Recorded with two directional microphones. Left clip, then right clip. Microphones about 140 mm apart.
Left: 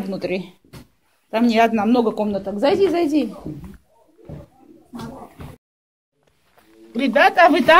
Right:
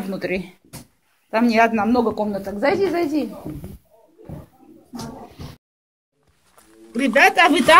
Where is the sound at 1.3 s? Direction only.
15° left (ahead or behind); by 3.3 s 35° left (ahead or behind).